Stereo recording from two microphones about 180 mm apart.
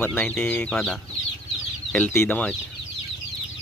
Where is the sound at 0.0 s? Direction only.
10° left (ahead or behind).